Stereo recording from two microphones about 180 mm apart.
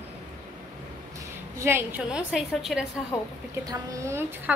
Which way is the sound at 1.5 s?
10° right (ahead or behind).